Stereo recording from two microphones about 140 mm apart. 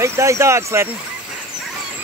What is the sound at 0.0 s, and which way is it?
Speech, 20° right (ahead or behind).